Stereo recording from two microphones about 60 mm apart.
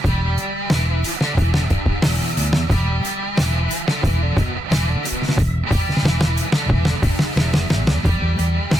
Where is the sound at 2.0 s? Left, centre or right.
Centre.